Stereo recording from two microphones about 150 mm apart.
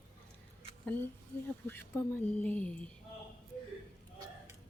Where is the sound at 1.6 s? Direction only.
15° left (ahead or behind).